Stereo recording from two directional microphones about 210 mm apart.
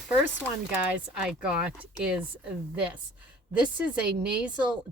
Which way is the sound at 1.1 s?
5° right (ahead or behind).